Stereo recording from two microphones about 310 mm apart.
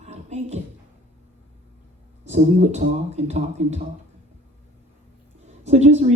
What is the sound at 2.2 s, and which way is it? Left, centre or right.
Speech, right.